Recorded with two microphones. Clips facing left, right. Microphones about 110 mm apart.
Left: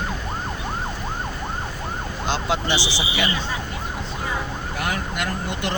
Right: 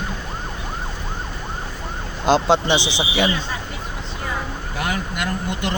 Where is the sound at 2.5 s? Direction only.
20° right (ahead or behind).